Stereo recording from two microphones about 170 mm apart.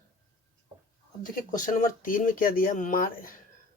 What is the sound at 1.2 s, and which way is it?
Speech, 50° left (ahead or behind).